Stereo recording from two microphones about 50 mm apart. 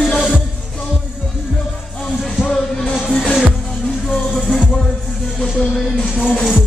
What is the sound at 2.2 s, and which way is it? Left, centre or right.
Music, centre.